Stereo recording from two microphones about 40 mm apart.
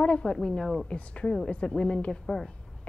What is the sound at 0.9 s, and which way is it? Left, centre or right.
A woman's voice, left.